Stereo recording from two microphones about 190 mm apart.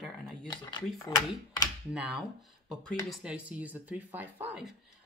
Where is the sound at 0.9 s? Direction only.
20° left (ahead or behind).